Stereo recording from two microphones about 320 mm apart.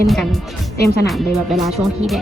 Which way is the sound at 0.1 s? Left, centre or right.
Centre.